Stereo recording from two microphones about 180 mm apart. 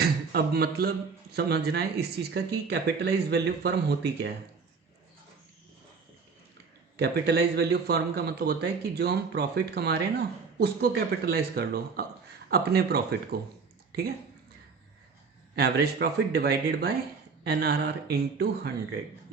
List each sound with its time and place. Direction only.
0.0 s beatboxing: 60° right (ahead or behind)
1.3 s a man's voice: 65° right (ahead or behind)
6.9 s a man's voice: 65° right (ahead or behind)
15.5 s a man's voice: 60° right (ahead or behind)